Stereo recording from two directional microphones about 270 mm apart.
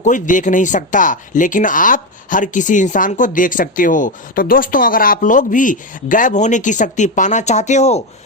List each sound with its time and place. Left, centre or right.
0.0 s speech: left